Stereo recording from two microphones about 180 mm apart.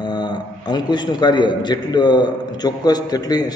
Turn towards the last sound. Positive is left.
turn(degrees=20)  # may be behind; listen again after turning